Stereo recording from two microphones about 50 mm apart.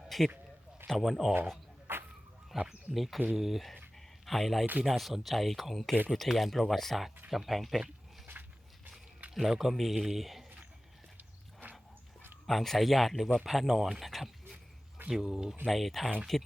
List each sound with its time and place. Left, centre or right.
0.1 s a sound: centre
0.9 s speech: centre
1.9 s a sound: right
2.6 s speech: centre
9.3 s speech: centre
11.2 s walk: right
12.5 s speech: centre
15.1 s speech: centre
15.7 s speech: centre